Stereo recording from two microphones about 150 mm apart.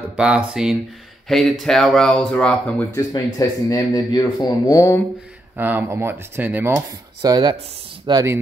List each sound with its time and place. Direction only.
0.1 s speech: 5° right (ahead or behind)
3.3 s speech: 25° left (ahead or behind)
5.6 s speech: 15° right (ahead or behind)
7.2 s speech: 30° right (ahead or behind)